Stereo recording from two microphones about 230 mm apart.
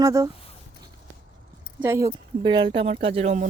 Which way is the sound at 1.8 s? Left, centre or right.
Centre.